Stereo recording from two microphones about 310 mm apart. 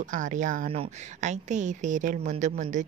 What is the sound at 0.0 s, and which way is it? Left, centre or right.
A woman's voice, right.